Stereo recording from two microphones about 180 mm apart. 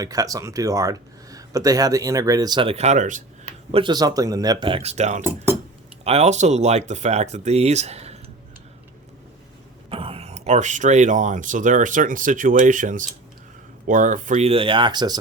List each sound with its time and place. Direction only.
0.0 s speech: 20° right (ahead or behind); by 3.5 s 45° right (ahead or behind)
3.7 s speech: 30° right (ahead or behind)
9.9 s speech: 30° right (ahead or behind)